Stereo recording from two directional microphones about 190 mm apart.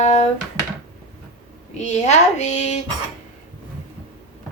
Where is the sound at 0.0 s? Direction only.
35° left (ahead or behind).